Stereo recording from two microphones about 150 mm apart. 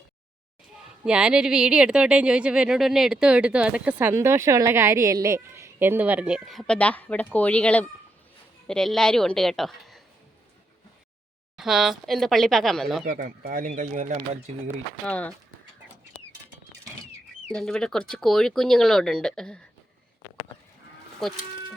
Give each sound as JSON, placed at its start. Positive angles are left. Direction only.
{"t": 1.0, "sound": "speech", "side_deg": -5}
{"t": 11.5, "sound": "speech", "side_deg": 0}
{"t": 13.1, "sound": "speech", "side_deg": -65}
{"t": 15.0, "sound": "speech", "side_deg": 10}
{"t": 17.5, "sound": "speech", "side_deg": 5}